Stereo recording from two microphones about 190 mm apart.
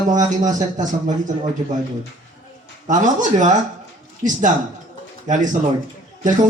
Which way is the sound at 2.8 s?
40° right (ahead or behind).